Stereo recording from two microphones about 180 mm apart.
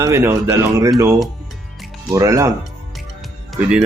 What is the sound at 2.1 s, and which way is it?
Speech, 20° right (ahead or behind).